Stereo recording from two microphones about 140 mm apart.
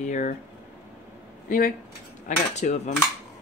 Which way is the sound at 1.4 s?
90° left.